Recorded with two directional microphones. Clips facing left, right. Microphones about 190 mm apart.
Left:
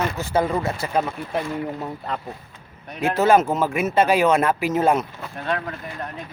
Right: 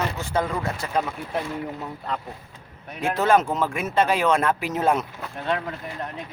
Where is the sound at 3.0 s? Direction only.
5° left (ahead or behind).